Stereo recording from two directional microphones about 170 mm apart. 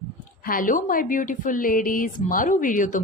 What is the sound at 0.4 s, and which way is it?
Speech, 55° left (ahead or behind).